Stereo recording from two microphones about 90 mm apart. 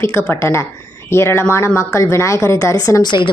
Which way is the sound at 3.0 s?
55° left (ahead or behind).